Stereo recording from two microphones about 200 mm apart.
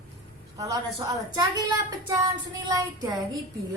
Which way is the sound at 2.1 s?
15° right (ahead or behind).